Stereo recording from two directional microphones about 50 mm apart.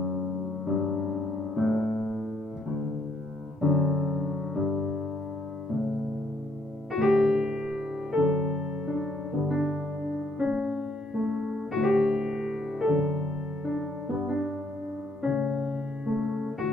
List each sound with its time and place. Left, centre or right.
0.7 s music: centre
1.9 s music: centre
3.6 s piano: centre
4.6 s music: centre
6.9 s music: centre